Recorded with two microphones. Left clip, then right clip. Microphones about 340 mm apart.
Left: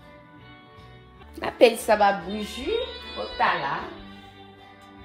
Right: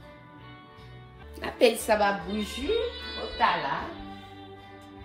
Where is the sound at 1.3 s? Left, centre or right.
Left.